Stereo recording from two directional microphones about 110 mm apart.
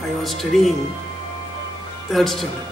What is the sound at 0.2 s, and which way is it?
Speech, centre (ahead or behind).